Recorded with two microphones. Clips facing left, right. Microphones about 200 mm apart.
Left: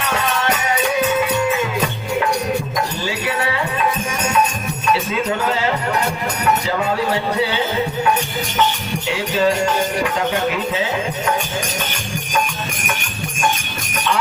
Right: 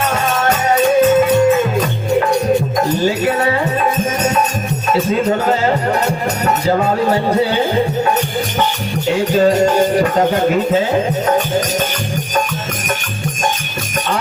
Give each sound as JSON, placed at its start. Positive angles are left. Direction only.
{"t": 0.1, "sound": "music", "side_deg": -45}
{"t": 3.2, "sound": "music", "side_deg": -45}
{"t": 4.9, "sound": "music", "side_deg": -45}
{"t": 9.0, "sound": "speech", "side_deg": -45}